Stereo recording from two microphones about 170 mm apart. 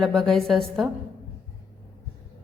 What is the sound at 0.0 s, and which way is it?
Speech, centre (ahead or behind).